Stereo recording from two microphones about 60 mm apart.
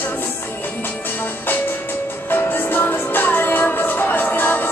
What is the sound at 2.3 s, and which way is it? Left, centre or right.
Music, left.